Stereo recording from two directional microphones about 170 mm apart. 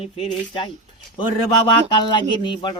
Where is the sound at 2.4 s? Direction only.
25° left (ahead or behind).